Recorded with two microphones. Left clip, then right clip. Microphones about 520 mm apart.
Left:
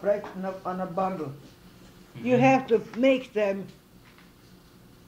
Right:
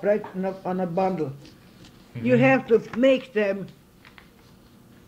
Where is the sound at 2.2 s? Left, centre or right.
Right.